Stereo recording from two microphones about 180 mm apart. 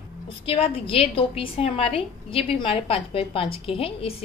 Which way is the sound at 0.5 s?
30° left (ahead or behind).